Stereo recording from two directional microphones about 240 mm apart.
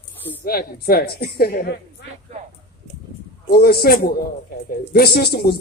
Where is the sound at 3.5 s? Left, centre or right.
Left.